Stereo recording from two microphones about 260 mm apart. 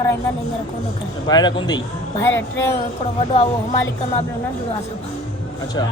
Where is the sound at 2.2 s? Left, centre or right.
Left.